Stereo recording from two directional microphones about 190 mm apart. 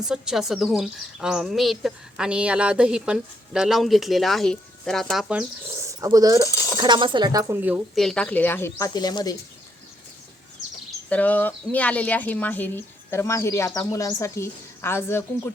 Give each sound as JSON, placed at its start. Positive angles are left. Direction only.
{"t": 0.0, "sound": "speech", "side_deg": -5}
{"t": 6.5, "sound": "speech", "side_deg": 15}
{"t": 6.7, "sound": "speech", "side_deg": -25}
{"t": 7.5, "sound": "speech", "side_deg": -10}
{"t": 11.1, "sound": "speech", "side_deg": 10}